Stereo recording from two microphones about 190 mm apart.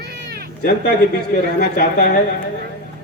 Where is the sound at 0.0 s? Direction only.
60° right (ahead or behind).